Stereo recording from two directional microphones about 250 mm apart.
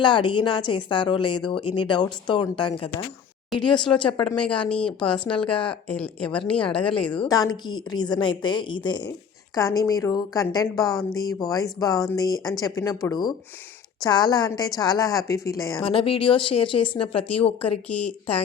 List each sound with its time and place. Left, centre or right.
0.0 s speech: centre
3.9 s speech: centre
7.2 s speech: centre
17.8 s speech: centre